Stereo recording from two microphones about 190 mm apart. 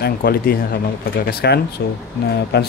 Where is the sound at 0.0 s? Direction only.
55° left (ahead or behind).